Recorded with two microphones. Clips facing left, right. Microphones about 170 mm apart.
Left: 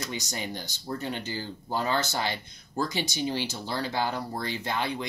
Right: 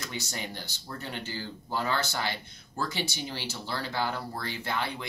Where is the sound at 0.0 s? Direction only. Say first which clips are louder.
Left 3 dB; 15° left (ahead or behind).